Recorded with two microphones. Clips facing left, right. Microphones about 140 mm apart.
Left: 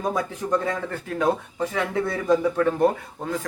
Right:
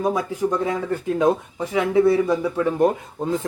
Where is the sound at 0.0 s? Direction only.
10° right (ahead or behind).